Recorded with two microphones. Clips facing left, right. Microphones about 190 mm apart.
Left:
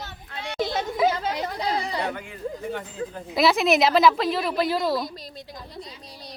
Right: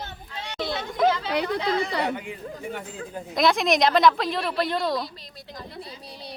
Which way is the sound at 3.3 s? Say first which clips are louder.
Left 2 dB; 5° left (ahead or behind).